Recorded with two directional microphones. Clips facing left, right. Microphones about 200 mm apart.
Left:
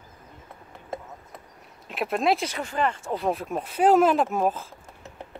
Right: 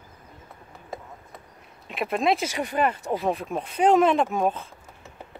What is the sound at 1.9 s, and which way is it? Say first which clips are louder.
Speech: even; centre (ahead or behind).